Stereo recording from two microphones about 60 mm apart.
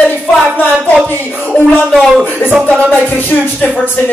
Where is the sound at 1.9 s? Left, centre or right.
Centre.